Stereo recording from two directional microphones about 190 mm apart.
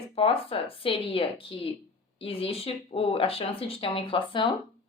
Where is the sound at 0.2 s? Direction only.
30° left (ahead or behind).